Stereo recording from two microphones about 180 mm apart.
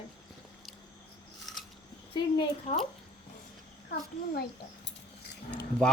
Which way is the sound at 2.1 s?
25° left (ahead or behind).